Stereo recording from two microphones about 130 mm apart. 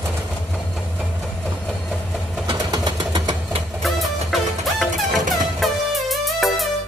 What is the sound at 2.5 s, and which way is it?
Engine, 35° right (ahead or behind).